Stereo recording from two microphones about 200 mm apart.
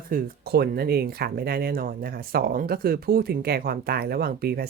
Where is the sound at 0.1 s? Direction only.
50° right (ahead or behind).